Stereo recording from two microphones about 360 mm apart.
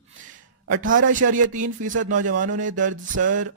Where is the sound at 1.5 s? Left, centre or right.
Right.